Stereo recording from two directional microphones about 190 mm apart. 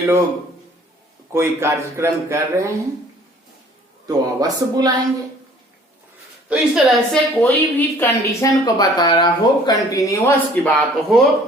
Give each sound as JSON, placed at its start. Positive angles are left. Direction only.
{"t": 1.3, "sound": "speech", "side_deg": -15}
{"t": 4.0, "sound": "speech", "side_deg": -20}
{"t": 6.5, "sound": "a woman's voice", "side_deg": 0}